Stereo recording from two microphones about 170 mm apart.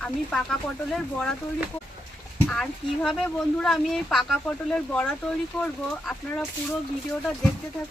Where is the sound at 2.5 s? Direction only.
Centre (ahead or behind).